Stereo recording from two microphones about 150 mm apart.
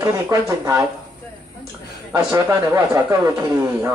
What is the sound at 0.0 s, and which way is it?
Speech, 20° right (ahead or behind).